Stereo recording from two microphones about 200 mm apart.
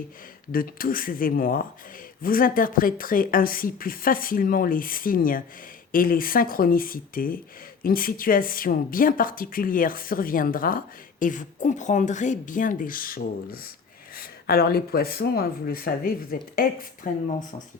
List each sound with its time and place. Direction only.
0.5 s speech: 45° left (ahead or behind)